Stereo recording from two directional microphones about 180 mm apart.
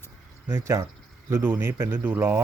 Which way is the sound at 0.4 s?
15° right (ahead or behind).